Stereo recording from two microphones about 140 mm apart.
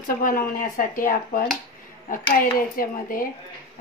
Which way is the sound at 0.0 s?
70° left (ahead or behind).